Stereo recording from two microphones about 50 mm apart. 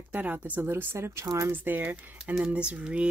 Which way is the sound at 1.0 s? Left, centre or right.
Right.